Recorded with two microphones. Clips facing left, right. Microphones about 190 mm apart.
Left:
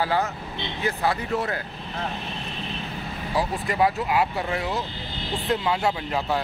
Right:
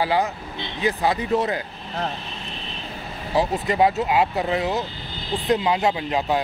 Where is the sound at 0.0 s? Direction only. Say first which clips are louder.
Right 3 dB; 15° right (ahead or behind).